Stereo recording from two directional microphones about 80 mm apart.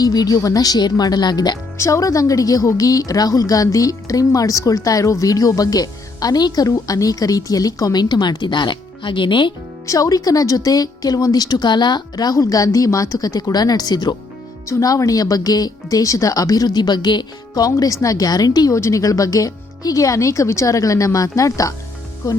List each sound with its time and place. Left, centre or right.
0.0 s speech: left
1.8 s a woman's voice: left
9.8 s a woman's voice: left
14.7 s a woman's voice: left
18.8 s a woman's voice: left